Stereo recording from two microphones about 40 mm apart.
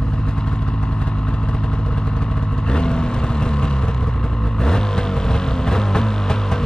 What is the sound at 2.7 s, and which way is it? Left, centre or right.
Vehicle, left.